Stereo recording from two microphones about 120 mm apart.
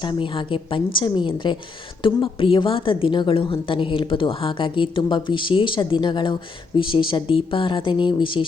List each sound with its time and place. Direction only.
0.0 s a woman's voice: 40° left (ahead or behind)